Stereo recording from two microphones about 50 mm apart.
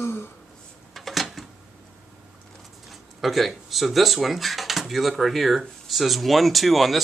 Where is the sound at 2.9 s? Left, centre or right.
Centre.